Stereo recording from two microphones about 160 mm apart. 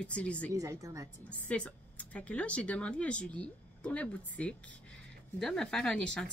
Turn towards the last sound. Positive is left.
turn(degrees=5)  # may be behind; listen again after turning